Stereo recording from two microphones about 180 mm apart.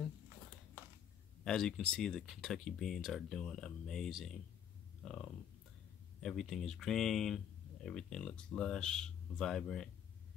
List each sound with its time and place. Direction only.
1.4 s speech: 5° left (ahead or behind)